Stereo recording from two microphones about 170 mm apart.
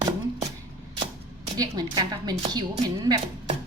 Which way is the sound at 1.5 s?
20° right (ahead or behind).